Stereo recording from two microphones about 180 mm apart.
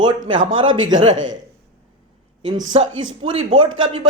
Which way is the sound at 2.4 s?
25° right (ahead or behind).